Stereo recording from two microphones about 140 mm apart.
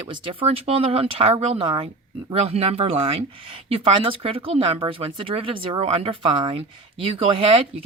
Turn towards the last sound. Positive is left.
turn(degrees=-40)  # may be behind; listen again after turning